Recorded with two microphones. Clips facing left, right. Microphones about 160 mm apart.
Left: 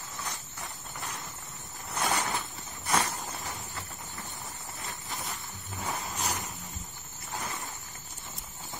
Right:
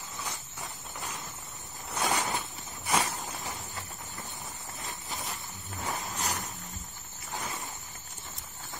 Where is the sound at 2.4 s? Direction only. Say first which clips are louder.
Even; centre (ahead or behind).